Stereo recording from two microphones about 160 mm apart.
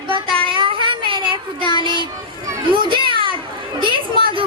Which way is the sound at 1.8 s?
30° right (ahead or behind).